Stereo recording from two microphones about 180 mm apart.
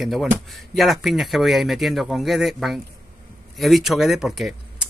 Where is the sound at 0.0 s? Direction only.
Centre (ahead or behind).